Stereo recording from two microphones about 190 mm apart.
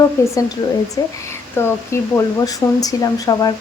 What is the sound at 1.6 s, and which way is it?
Speech, 15° left (ahead or behind).